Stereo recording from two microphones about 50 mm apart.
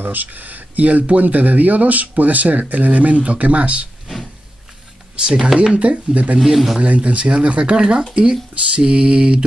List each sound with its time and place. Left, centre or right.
0.0 s speech: right
5.1 s speech: centre
6.4 s a man's voice: centre
6.8 s speech: right